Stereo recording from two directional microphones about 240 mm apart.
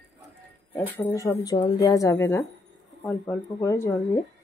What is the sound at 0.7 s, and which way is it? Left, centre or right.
A woman's voice, centre.